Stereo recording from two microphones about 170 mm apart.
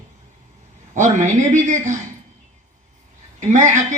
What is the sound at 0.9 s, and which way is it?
A woman's voice, 45° right (ahead or behind).